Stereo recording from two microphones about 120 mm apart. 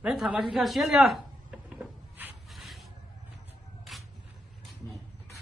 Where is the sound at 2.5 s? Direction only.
Centre (ahead or behind).